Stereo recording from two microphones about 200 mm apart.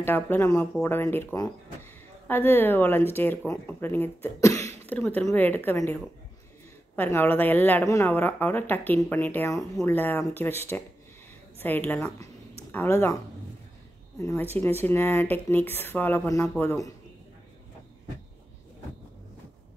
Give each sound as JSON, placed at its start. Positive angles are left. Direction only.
{"t": 0.0, "sound": "speech", "side_deg": 10}
{"t": 7.0, "sound": "speech", "side_deg": 10}